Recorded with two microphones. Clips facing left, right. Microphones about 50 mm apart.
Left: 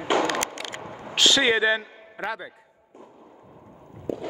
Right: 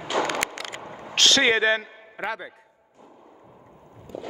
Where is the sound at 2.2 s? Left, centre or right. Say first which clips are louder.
Right 1 dB; centre.